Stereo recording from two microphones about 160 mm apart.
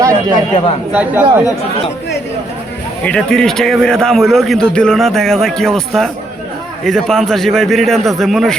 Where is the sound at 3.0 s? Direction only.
5° left (ahead or behind).